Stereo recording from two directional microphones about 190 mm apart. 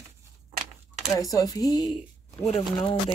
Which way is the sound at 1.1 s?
20° left (ahead or behind).